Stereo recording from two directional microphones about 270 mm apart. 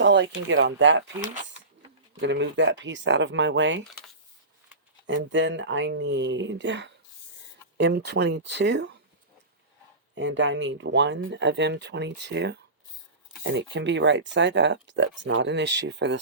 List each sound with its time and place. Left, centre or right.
0.0 s speech: right
2.2 s speech: right
5.0 s speech: right
10.2 s speech: right